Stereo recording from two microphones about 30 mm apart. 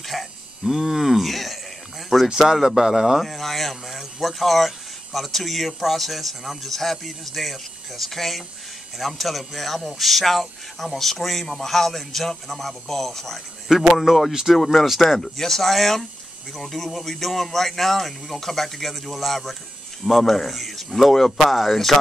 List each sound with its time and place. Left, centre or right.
0.0 s a sound: centre
2.2 s speech: centre
3.2 s a man's voice: centre
13.7 s speech: centre
14.0 s a man's voice: centre
14.9 s speech: centre
15.1 s a man's voice: centre
21.4 s speech: centre